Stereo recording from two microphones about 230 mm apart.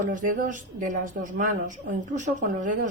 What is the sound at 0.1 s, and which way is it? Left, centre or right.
Speech, right.